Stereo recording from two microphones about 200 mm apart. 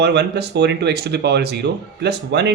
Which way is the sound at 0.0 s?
55° right (ahead or behind).